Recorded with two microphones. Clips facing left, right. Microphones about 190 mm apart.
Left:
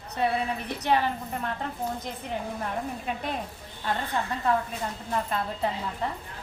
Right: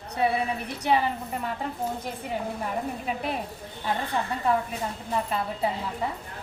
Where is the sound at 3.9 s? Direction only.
10° right (ahead or behind).